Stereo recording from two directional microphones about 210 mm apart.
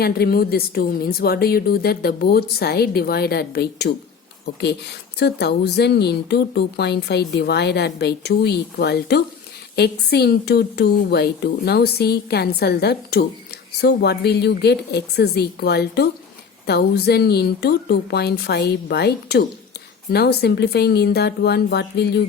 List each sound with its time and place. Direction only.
0.0 s speech: 45° left (ahead or behind)
5.2 s speech: 50° left (ahead or behind)